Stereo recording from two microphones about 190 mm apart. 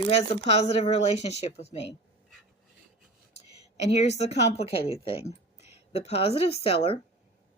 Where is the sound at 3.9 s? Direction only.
35° left (ahead or behind).